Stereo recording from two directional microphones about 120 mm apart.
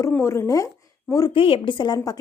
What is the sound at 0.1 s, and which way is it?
Speech, 20° left (ahead or behind).